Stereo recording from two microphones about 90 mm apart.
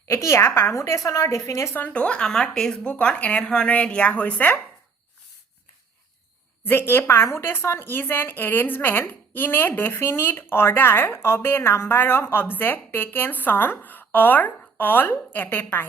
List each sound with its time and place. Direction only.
0.1 s a woman's voice: 30° left (ahead or behind)
1.8 s speech: 15° left (ahead or behind)
6.7 s a woman's voice: 25° left (ahead or behind)